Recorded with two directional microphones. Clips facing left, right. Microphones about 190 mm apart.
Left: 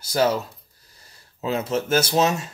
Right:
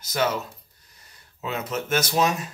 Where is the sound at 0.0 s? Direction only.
30° left (ahead or behind).